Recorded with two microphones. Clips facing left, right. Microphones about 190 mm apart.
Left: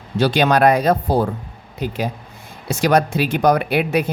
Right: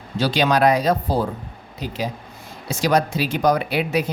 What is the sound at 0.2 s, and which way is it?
Speech, 55° left (ahead or behind).